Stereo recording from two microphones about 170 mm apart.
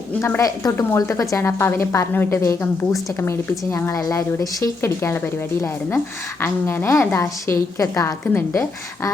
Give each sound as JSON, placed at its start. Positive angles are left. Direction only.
{"t": 0.2, "sound": "a woman's voice", "side_deg": 15}